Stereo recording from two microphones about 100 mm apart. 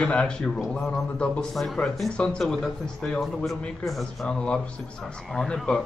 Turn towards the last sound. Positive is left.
turn(degrees=5)  # may be behind; listen again after turning